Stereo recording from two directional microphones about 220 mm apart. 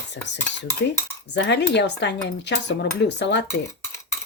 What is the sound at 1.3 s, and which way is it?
Speech, 50° left (ahead or behind).